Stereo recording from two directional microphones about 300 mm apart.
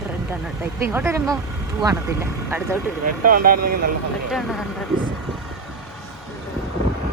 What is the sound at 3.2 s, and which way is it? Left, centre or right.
Speech, right.